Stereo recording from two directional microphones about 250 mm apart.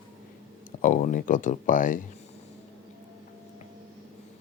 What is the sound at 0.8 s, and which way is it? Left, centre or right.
Speech, left.